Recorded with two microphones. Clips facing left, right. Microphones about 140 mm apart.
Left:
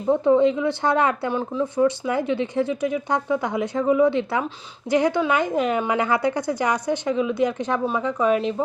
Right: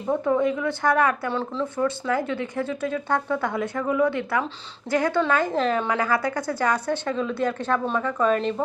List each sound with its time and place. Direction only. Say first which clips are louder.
0.1 s a woman's voice: left 5 dB; 20° left (ahead or behind)